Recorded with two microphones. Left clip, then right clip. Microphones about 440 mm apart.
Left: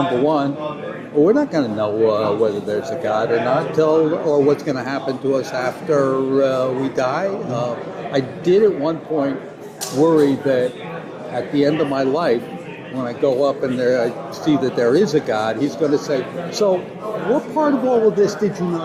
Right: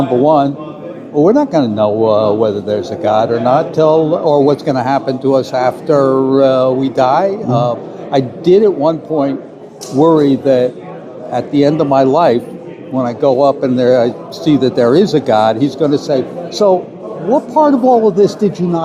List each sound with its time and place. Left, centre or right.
1.2 s a man's voice: right